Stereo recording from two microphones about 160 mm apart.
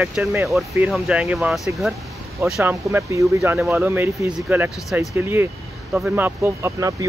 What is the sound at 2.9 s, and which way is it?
Speech, 20° right (ahead or behind).